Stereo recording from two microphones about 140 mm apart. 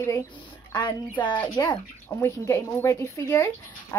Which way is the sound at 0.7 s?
35° left (ahead or behind).